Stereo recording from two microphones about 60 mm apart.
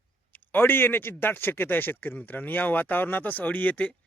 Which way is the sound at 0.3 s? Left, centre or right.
Left.